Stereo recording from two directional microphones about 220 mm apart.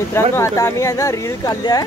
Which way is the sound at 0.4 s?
10° left (ahead or behind).